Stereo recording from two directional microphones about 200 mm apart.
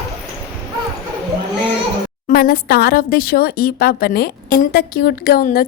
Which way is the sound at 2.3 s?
50° left (ahead or behind).